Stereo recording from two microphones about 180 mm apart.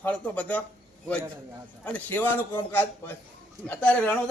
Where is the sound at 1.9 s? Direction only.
10° left (ahead or behind).